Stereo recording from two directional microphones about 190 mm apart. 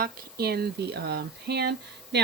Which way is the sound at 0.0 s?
55° right (ahead or behind).